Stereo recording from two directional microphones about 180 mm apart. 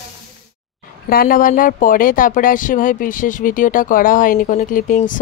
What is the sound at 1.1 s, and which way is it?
Speech, 55° left (ahead or behind).